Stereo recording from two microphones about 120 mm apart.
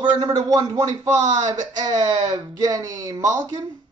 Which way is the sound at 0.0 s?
35° right (ahead or behind).